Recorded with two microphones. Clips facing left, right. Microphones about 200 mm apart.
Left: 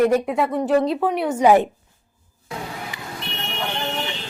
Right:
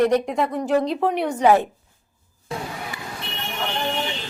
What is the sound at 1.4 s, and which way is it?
Speech, 15° left (ahead or behind).